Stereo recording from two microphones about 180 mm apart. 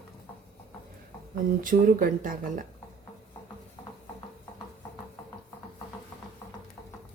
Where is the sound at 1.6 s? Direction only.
50° right (ahead or behind).